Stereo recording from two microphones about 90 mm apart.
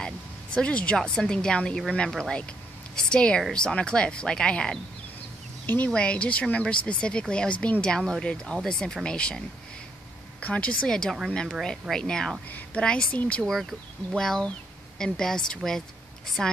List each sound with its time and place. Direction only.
0.6 s a woman's voice: 10° left (ahead or behind)
5.9 s a woman's voice: 10° left (ahead or behind)
10.4 s a woman's voice: 15° left (ahead or behind)
12.4 s a woman's voice: 20° left (ahead or behind)
13.4 s a woman's voice: centre (ahead or behind)